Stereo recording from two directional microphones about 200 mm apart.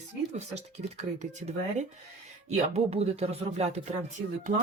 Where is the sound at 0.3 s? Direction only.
35° right (ahead or behind).